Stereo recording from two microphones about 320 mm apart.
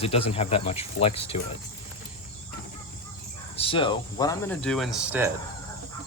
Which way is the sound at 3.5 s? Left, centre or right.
Centre.